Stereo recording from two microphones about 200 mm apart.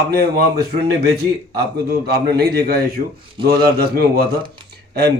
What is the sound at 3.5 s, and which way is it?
Speech, 50° right (ahead or behind).